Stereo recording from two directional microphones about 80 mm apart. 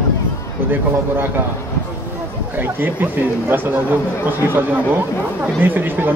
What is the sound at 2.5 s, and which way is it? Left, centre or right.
Speech, right.